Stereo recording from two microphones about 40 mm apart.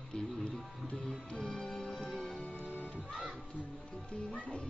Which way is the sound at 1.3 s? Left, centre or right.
Left.